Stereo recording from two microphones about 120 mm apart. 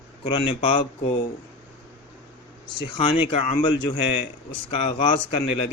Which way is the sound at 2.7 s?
45° left (ahead or behind).